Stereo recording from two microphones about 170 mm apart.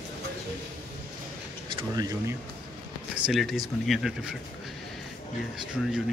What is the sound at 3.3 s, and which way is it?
Speech, centre (ahead or behind).